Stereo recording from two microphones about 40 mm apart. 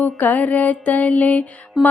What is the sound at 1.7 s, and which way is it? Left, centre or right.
Music, centre.